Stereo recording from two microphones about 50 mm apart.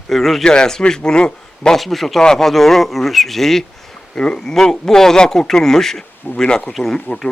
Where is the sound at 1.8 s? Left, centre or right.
Centre.